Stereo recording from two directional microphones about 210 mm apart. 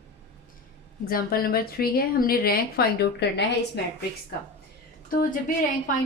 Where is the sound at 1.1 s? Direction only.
45° left (ahead or behind).